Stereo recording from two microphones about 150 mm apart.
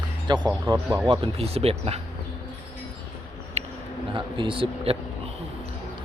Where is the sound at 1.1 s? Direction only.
40° right (ahead or behind).